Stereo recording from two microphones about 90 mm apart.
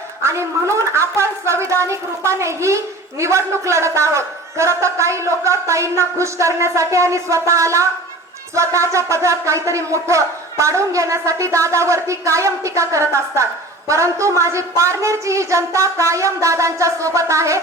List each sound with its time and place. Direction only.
0.2 s speech: 30° right (ahead or behind)